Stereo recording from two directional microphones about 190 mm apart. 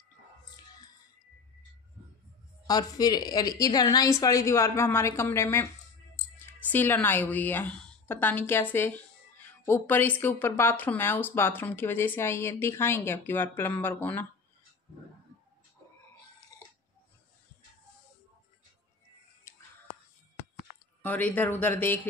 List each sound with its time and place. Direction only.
2.6 s a woman's voice: 20° left (ahead or behind)
19.5 s a sound: 15° left (ahead or behind)
21.0 s a woman's voice: 10° left (ahead or behind)